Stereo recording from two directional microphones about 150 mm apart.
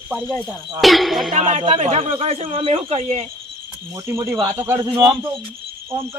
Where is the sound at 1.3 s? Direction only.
45° right (ahead or behind).